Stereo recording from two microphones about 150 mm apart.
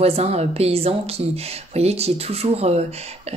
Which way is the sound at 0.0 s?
40° right (ahead or behind).